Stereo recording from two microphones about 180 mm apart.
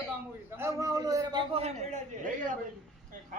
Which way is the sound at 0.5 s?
15° right (ahead or behind).